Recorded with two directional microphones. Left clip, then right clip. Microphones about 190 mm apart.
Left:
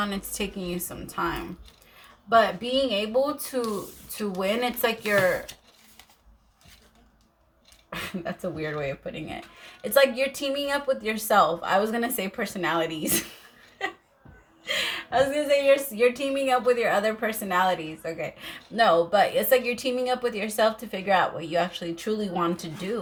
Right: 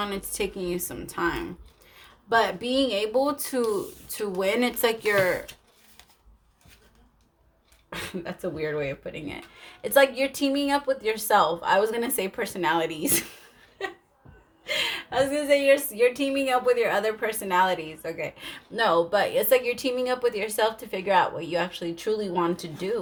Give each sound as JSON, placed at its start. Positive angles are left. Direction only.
{"t": 0.0, "sound": "speech", "side_deg": -45}
{"t": 7.9, "sound": "speech", "side_deg": -50}
{"t": 14.6, "sound": "speech", "side_deg": -45}